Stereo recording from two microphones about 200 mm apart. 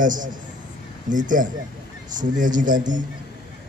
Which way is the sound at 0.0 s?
40° right (ahead or behind).